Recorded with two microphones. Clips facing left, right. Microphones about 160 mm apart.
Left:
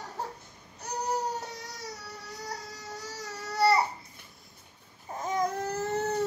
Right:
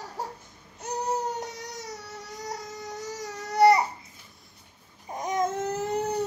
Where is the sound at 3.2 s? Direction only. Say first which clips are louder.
Right 7 dB; 20° right (ahead or behind).